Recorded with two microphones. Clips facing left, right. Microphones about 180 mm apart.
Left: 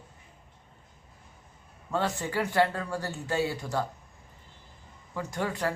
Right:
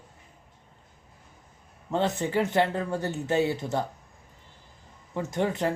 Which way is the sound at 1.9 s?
20° right (ahead or behind).